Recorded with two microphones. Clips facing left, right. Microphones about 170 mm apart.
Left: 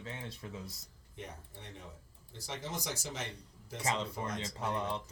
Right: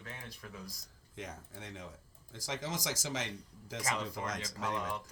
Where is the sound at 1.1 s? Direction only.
90° right.